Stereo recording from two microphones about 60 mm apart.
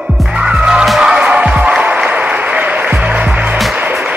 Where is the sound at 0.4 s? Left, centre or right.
Centre.